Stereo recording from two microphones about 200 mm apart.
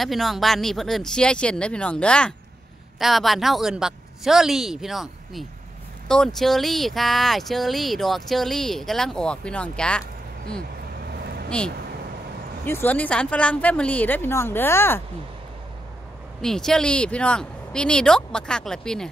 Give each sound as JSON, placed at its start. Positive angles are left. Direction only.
{"t": 0.0, "sound": "speech", "side_deg": 0}
{"t": 11.1, "sound": "vehicle", "side_deg": -50}
{"t": 12.6, "sound": "a woman's voice", "side_deg": 10}
{"t": 16.3, "sound": "speech", "side_deg": 0}